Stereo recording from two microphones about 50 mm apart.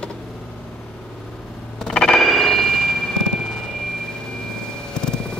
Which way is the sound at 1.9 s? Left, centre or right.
Centre.